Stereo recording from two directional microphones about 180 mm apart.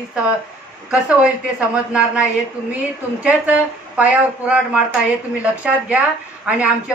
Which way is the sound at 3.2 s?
5° right (ahead or behind).